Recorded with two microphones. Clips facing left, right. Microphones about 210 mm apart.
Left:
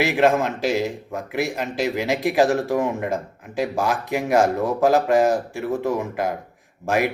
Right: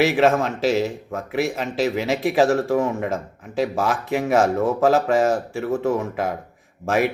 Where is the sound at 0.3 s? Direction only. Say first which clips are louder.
Right 1 dB; 15° left (ahead or behind).